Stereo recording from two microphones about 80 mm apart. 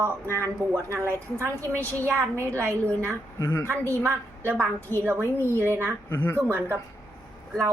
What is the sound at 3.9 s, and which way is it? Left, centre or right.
Speech, right.